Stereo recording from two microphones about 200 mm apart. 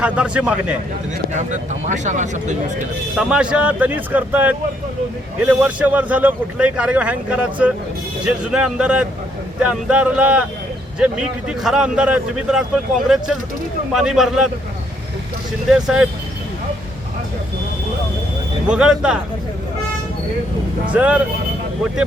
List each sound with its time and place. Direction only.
0.0 s speech: 5° right (ahead or behind)
1.3 s speech: 35° right (ahead or behind)
3.2 s a man's voice: 5° right (ahead or behind)
11.4 s speech: 5° right (ahead or behind)
15.7 s speech: 5° right (ahead or behind)
18.7 s speech: 5° right (ahead or behind)
20.9 s a man's voice: 5° right (ahead or behind)